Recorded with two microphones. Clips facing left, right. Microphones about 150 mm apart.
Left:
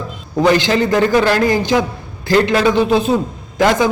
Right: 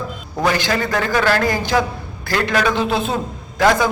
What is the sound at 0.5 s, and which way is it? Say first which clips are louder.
A man's voice: left 6 dB; 20° left (ahead or behind).